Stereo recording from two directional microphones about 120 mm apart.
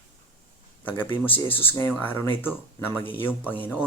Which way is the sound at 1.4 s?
20° left (ahead or behind).